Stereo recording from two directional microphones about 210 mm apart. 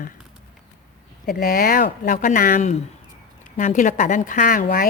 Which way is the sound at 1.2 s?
45° left (ahead or behind).